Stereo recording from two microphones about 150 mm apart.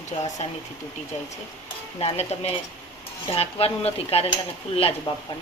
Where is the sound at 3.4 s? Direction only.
40° left (ahead or behind).